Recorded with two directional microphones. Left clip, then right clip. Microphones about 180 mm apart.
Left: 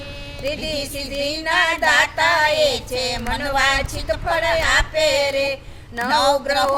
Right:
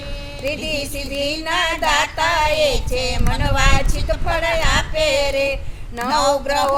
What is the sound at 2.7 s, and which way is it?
Music, 30° left (ahead or behind).